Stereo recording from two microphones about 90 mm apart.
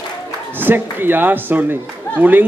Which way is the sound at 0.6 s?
20° right (ahead or behind).